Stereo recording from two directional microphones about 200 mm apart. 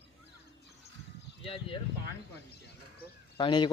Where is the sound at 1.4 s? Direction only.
25° left (ahead or behind).